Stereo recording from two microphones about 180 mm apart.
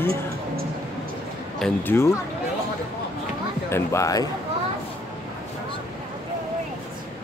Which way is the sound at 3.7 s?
15° left (ahead or behind).